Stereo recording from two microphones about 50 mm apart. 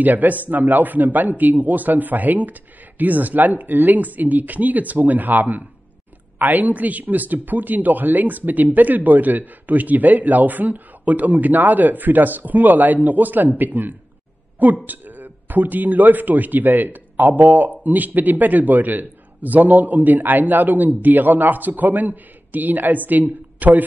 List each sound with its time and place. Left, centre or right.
0.0 s speech: right